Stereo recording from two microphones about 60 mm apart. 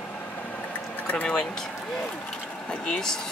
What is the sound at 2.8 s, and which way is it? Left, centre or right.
Speech, centre.